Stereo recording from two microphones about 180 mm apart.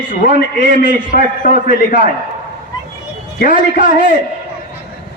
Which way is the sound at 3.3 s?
50° left (ahead or behind).